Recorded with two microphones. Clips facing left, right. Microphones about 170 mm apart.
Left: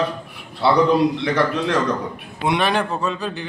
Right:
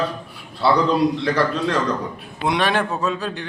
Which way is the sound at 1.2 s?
15° left (ahead or behind).